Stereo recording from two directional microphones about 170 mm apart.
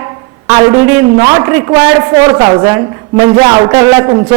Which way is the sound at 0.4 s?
20° right (ahead or behind).